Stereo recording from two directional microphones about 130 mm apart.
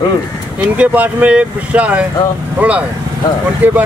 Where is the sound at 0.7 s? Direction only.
10° right (ahead or behind).